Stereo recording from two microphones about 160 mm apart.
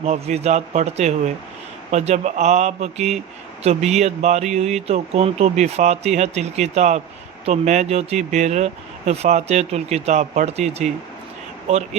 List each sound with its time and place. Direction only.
0.0 s speech: 40° right (ahead or behind)